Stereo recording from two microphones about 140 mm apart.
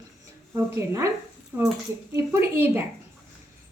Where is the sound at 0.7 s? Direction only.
20° right (ahead or behind).